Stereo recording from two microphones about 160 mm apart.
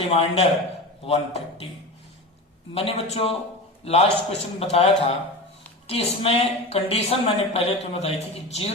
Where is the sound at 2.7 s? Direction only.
40° left (ahead or behind).